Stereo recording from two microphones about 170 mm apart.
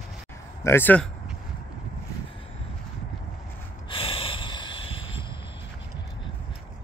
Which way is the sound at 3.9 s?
35° left (ahead or behind).